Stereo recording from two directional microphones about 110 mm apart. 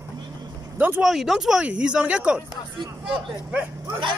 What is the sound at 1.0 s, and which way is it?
Speech, centre (ahead or behind).